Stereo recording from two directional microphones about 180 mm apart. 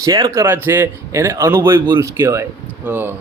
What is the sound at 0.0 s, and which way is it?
A man's voice, 20° right (ahead or behind).